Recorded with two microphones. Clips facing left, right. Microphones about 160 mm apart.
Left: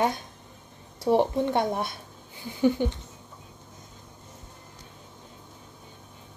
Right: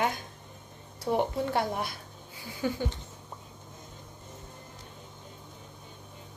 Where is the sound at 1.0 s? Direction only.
25° left (ahead or behind).